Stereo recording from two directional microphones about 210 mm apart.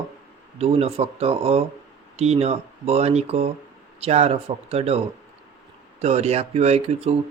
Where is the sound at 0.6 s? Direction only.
30° right (ahead or behind).